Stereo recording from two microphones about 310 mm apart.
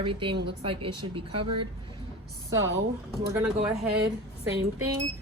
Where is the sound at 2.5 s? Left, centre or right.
Right.